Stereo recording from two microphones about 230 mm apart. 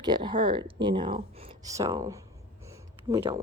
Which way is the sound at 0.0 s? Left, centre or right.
Centre.